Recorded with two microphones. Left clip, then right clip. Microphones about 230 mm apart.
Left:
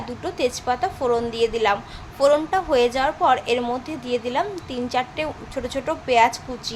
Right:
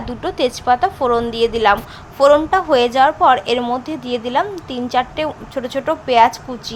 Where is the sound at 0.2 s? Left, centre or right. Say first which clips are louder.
Right 5 dB; right.